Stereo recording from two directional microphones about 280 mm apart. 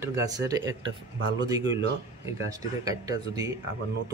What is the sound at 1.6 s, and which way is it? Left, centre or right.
Speech, right.